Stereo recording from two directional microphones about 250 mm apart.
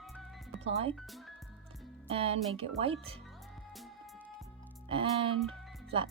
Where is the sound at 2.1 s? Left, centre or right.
Right.